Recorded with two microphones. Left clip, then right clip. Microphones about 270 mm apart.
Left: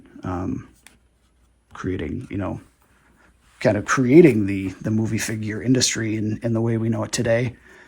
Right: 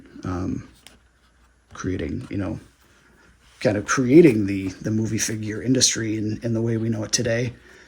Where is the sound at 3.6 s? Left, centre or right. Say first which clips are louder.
Left 2 dB; left.